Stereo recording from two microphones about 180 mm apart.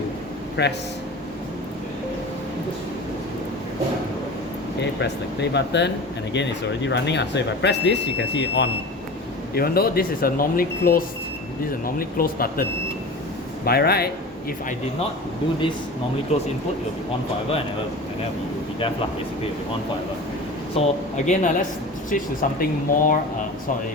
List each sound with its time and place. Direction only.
0.6 s speech: 70° left (ahead or behind)
4.9 s speech: 70° left (ahead or behind)
9.6 s speech: 60° left (ahead or behind)
13.7 s speech: 60° left (ahead or behind)
16.3 s speech: 35° left (ahead or behind)
20.7 s speech: 40° left (ahead or behind)
22.1 s speech: 50° left (ahead or behind)